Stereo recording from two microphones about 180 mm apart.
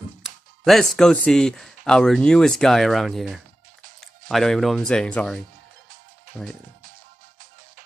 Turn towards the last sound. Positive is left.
turn(degrees=5)  # may be behind; listen again after turning